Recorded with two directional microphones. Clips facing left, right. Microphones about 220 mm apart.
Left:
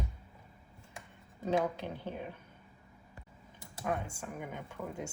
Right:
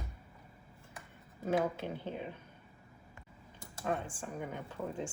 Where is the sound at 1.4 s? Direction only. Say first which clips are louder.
Left 1 dB; 15° left (ahead or behind).